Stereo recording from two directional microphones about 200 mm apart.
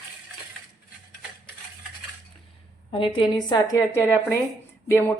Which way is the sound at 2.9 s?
25° left (ahead or behind).